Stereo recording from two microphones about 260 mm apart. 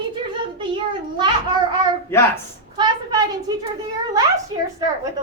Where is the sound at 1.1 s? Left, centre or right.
Centre.